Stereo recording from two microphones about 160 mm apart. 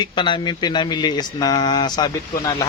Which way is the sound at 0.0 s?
30° left (ahead or behind).